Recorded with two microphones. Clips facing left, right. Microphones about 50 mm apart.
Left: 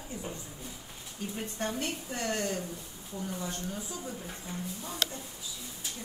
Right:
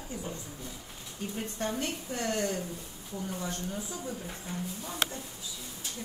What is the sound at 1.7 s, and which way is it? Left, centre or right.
Speech, left.